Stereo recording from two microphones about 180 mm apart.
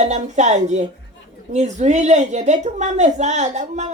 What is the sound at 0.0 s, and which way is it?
A woman's voice, 40° right (ahead or behind).